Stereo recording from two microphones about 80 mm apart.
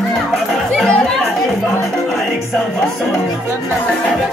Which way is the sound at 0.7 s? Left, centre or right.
Centre.